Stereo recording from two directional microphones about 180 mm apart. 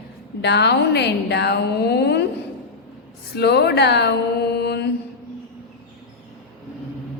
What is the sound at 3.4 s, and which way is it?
Mantra, 65° left (ahead or behind).